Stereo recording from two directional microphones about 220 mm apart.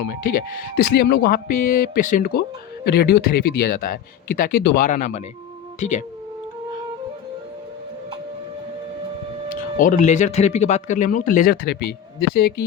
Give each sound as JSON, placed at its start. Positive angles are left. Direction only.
{"t": 0.0, "sound": "speech", "side_deg": 40}
{"t": 9.7, "sound": "speech", "side_deg": 35}